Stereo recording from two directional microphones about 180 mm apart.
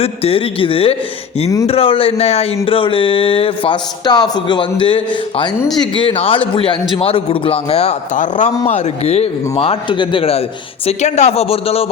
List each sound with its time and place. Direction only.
0.0 s a man's voice: 35° left (ahead or behind)